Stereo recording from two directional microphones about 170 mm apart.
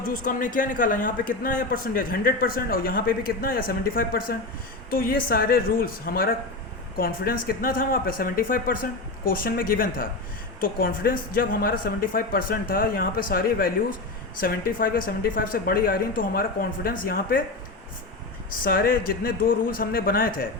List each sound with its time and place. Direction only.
0.0 s a man's voice: 55° left (ahead or behind)
18.5 s a man's voice: 60° left (ahead or behind)